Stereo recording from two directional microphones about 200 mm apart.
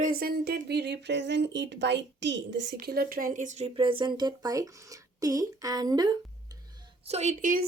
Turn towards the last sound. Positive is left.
turn(degrees=-40)  # may be behind; listen again after turning